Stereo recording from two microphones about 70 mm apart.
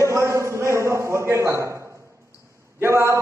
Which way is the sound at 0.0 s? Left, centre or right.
Right.